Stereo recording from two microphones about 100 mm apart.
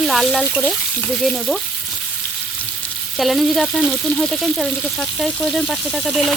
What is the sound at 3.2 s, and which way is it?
Frying, centre (ahead or behind).